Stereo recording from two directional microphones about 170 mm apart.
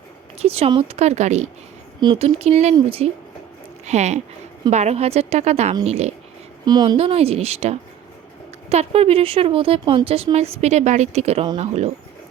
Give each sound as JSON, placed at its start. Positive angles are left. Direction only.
{"t": 0.3, "sound": "speech", "side_deg": -35}
{"t": 2.0, "sound": "speech", "side_deg": -30}
{"t": 6.7, "sound": "a woman's voice", "side_deg": -25}
{"t": 6.9, "sound": "speech", "side_deg": -35}